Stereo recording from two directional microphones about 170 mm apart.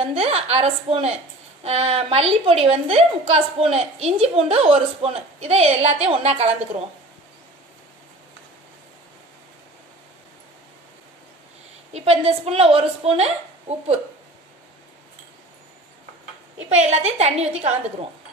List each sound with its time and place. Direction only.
0.0 s a woman's voice: 35° right (ahead or behind)
11.9 s a woman's voice: 35° right (ahead or behind)
16.6 s a woman's voice: 40° right (ahead or behind)